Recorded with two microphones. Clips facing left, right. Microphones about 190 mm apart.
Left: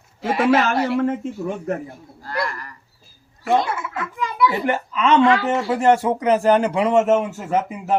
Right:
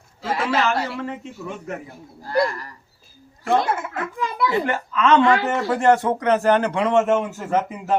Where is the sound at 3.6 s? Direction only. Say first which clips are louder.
Right 2 dB; 50° right (ahead or behind).